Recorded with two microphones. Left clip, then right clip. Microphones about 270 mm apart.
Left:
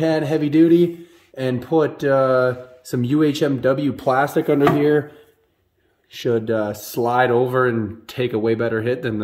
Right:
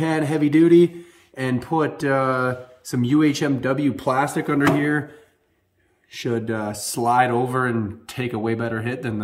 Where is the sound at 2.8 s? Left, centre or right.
Centre.